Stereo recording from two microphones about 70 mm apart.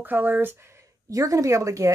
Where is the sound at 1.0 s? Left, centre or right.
Right.